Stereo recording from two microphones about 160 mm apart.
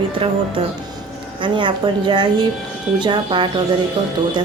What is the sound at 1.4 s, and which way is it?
A woman's voice, 30° right (ahead or behind).